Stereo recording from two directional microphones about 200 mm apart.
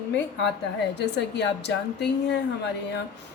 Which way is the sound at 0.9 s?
60° left (ahead or behind).